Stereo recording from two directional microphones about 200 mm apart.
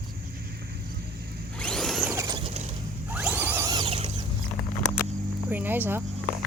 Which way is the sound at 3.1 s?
5° right (ahead or behind).